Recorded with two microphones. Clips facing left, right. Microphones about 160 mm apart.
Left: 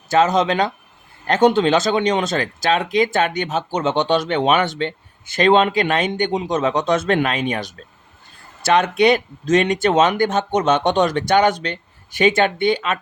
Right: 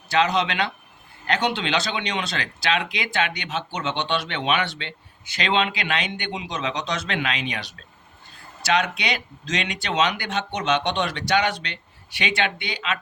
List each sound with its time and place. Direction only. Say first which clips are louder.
0.1 s speech: left 6 dB; 45° left (ahead or behind)